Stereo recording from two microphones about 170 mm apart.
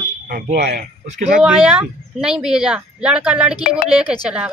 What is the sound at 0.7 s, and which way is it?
Speech, 45° right (ahead or behind).